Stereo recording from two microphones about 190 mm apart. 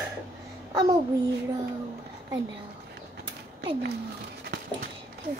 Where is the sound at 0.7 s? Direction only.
25° right (ahead or behind).